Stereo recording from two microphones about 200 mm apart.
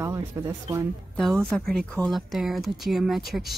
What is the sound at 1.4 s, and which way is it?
Speech, 5° left (ahead or behind).